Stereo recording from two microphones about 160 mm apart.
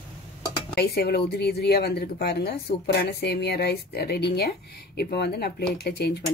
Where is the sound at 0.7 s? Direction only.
75° left (ahead or behind).